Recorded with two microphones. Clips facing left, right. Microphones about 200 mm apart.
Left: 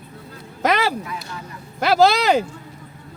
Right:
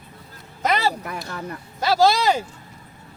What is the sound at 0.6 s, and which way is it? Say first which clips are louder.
Speech: left 2 dB; 90° left.